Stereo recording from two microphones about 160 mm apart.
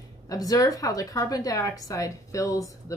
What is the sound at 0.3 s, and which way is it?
A woman's voice, 20° left (ahead or behind).